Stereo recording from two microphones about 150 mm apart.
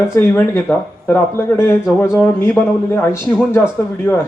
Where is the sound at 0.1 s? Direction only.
15° left (ahead or behind).